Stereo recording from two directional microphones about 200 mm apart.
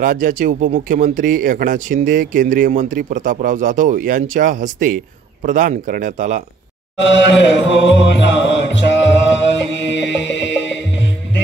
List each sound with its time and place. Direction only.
0.0 s speech: 40° right (ahead or behind)
7.0 s music: 65° left (ahead or behind)